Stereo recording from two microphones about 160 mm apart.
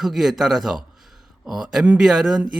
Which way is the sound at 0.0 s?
Centre (ahead or behind).